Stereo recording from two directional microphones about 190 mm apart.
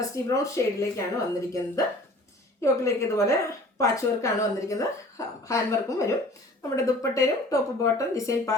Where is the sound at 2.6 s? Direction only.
15° left (ahead or behind).